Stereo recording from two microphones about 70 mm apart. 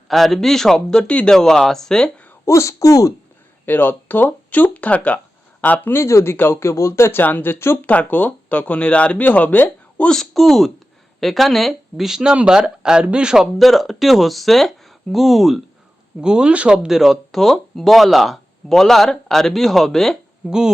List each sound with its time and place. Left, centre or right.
0.1 s speech: centre
2.4 s speech: left
3.7 s speech: left
10.1 s speech: centre
16.2 s speech: centre
20.5 s speech: centre